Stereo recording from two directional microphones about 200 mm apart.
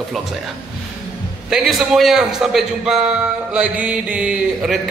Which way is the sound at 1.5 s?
Centre (ahead or behind).